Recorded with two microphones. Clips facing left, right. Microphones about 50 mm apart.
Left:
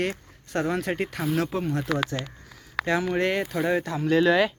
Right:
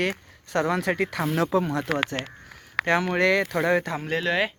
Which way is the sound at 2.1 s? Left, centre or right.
Right.